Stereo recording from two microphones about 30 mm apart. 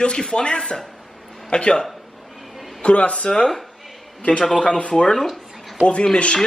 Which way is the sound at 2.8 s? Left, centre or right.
Left.